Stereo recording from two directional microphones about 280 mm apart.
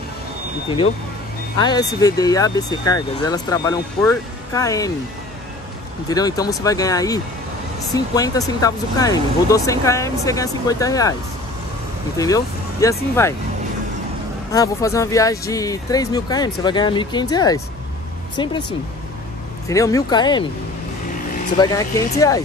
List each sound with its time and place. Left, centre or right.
1.6 s speech: centre
6.0 s speech: centre
12.2 s speech: centre
14.5 s speech: centre
19.7 s speech: centre
21.5 s speech: centre